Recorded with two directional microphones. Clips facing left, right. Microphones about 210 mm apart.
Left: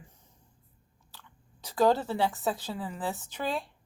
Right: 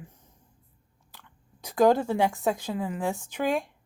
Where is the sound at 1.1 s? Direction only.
10° right (ahead or behind).